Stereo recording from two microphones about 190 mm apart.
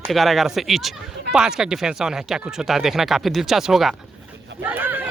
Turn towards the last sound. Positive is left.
turn(degrees=-10)  # may be behind; listen again after turning